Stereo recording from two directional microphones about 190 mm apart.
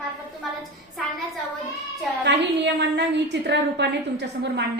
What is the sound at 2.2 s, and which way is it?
A woman's voice, 65° right (ahead or behind).